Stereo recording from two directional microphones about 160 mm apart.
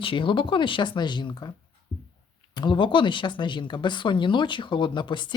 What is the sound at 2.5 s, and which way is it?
Speech, 30° left (ahead or behind).